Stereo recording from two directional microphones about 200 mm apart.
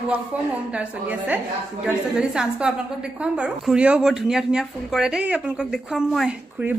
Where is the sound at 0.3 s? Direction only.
5° right (ahead or behind).